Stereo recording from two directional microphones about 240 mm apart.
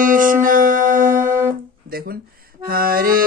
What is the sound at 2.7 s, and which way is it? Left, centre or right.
Music, right.